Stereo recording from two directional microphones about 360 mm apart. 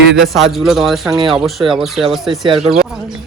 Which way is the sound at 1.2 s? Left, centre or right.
Centre.